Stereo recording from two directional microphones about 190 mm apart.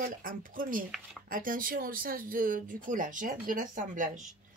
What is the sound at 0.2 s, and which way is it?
Speech, 45° right (ahead or behind).